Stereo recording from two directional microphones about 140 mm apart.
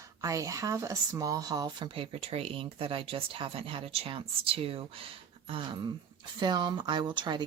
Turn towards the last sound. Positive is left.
turn(degrees=-35)  # may be behind; listen again after turning